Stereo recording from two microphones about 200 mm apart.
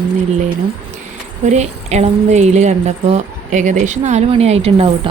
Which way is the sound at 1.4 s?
35° right (ahead or behind).